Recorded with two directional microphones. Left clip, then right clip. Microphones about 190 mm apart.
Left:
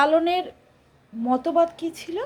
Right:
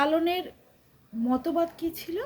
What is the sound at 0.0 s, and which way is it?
A woman's voice, 20° right (ahead or behind).